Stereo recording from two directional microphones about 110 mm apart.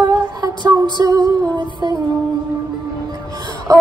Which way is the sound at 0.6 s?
35° right (ahead or behind).